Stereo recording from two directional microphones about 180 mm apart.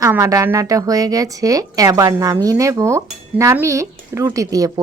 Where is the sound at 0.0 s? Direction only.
20° right (ahead or behind).